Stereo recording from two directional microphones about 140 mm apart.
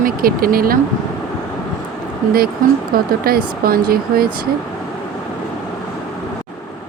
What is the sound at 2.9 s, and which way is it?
Speech, 90° right.